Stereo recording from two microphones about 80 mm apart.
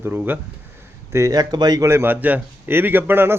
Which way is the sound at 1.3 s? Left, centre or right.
Right.